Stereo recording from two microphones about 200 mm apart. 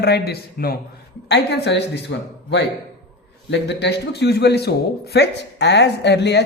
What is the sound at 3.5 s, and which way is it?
A man's voice, 60° left (ahead or behind).